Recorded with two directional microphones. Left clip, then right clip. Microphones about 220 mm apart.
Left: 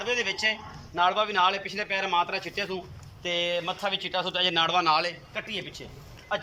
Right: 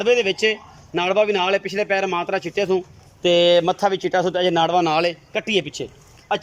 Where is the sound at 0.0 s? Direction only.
55° right (ahead or behind).